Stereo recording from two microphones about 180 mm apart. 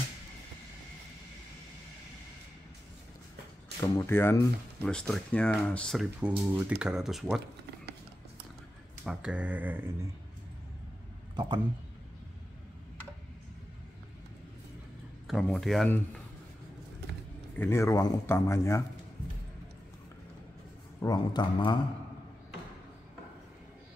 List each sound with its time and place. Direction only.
3.9 s speech: 15° left (ahead or behind)
9.0 s speech: 5° right (ahead or behind)
11.3 s speech: 25° right (ahead or behind)
15.2 s speech: centre (ahead or behind)
17.6 s speech: 15° left (ahead or behind)
21.0 s a man's voice: 20° left (ahead or behind)